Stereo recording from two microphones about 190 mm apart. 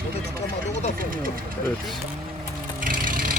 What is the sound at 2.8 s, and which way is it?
Vehicle, 45° right (ahead or behind).